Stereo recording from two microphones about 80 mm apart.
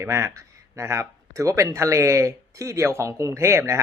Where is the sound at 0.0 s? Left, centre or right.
Right.